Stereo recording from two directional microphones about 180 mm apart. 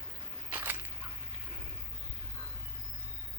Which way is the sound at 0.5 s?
10° right (ahead or behind).